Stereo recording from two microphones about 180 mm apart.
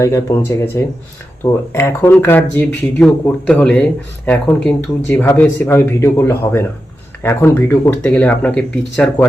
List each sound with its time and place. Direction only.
0.0 s speech: 15° left (ahead or behind)